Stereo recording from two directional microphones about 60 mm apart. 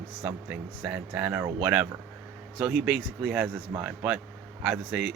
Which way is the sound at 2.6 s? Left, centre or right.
Centre.